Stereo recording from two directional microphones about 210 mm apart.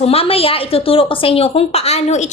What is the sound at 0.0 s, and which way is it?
A woman's voice, 30° left (ahead or behind).